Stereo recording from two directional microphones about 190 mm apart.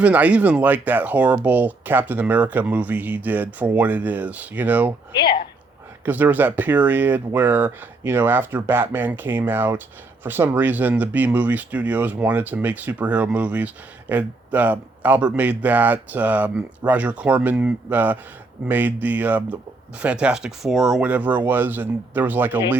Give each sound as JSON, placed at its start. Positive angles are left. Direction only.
{"t": 0.0, "sound": "speech", "side_deg": -5}
{"t": 5.1, "sound": "a woman's voice", "side_deg": 25}
{"t": 6.1, "sound": "speech", "side_deg": -10}